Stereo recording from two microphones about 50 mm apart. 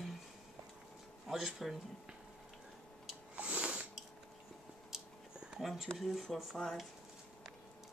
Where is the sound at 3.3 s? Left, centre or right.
Right.